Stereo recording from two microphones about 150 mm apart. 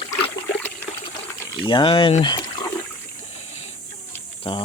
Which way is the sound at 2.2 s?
30° left (ahead or behind).